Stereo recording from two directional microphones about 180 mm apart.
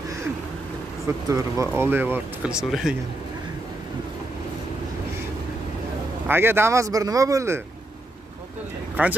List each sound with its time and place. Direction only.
1.3 s speech: 15° right (ahead or behind)
6.2 s speech: 10° right (ahead or behind)
9.0 s speech: 10° right (ahead or behind)